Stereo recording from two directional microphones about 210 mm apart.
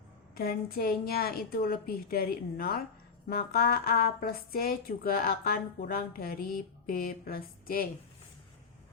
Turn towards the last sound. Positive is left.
turn(degrees=45)  # may be behind; listen again after turning